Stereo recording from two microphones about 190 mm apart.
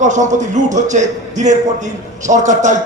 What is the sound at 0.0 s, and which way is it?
A man's voice, 40° right (ahead or behind).